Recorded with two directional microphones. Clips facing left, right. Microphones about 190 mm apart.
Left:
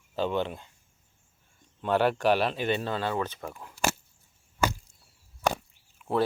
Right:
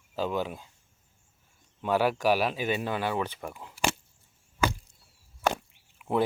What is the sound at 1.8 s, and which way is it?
Speech, 5° right (ahead or behind).